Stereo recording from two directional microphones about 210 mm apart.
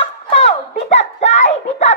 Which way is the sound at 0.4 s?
30° left (ahead or behind).